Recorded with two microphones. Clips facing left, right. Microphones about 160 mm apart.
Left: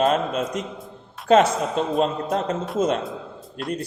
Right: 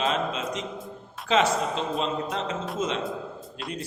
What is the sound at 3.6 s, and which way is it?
Speech, centre (ahead or behind).